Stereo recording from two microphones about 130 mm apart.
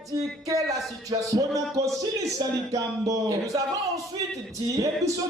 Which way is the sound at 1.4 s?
25° right (ahead or behind).